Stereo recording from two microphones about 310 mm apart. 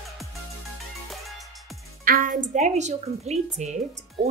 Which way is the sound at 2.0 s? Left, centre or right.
Right.